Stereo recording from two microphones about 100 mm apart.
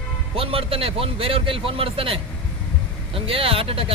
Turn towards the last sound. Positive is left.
turn(degrees=-70)  # may be behind; listen again after turning